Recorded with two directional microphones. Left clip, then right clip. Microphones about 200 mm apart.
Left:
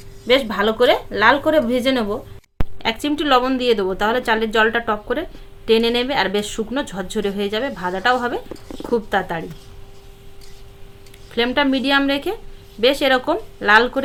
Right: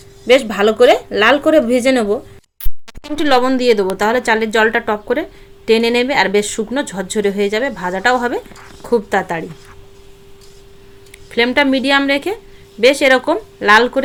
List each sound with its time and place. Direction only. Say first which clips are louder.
0.3 s a woman's voice: right 5 dB; 20° right (ahead or behind)
11.3 s speech: right 5 dB; 15° right (ahead or behind)